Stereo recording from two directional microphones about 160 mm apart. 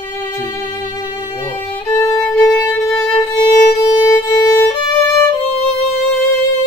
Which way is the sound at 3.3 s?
20° left (ahead or behind).